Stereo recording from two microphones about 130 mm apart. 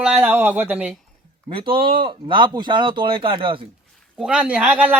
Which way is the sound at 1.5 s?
40° right (ahead or behind).